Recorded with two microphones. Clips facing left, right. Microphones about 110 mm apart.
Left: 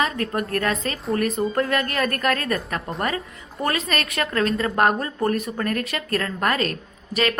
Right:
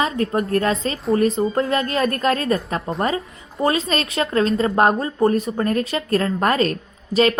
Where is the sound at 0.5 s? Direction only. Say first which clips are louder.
Right 4 dB; 30° right (ahead or behind).